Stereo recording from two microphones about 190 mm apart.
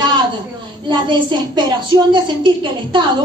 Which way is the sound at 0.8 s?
25° right (ahead or behind).